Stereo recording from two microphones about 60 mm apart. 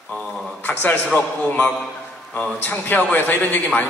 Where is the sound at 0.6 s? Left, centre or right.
Left.